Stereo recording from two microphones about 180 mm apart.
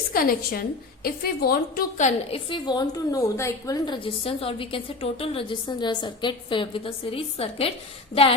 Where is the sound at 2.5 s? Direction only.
25° left (ahead or behind).